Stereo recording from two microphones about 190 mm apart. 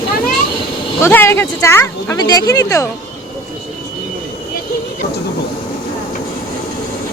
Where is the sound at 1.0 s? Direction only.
15° left (ahead or behind).